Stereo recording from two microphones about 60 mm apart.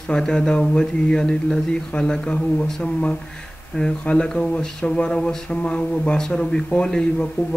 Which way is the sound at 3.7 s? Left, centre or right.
Left.